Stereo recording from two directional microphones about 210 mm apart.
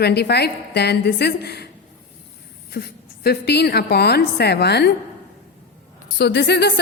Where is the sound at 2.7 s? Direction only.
50° left (ahead or behind).